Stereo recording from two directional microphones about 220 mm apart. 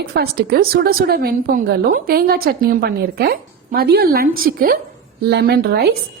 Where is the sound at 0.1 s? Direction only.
45° right (ahead or behind).